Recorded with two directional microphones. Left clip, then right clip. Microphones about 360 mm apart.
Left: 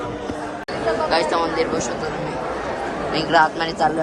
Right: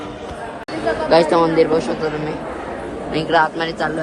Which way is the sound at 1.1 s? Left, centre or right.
Centre.